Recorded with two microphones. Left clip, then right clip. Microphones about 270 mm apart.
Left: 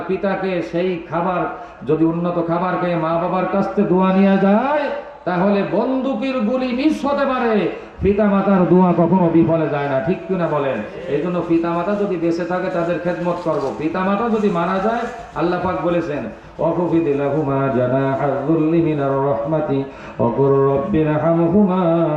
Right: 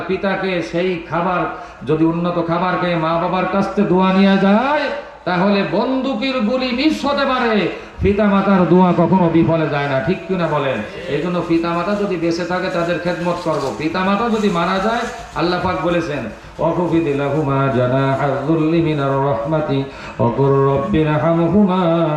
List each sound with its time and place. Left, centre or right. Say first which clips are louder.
0.9 s a man's voice: right 2 dB; centre
2.6 s a man's voice: right 2 dB; centre
16.6 s speech: right 1 dB; left
17.1 s a man's voice: even; centre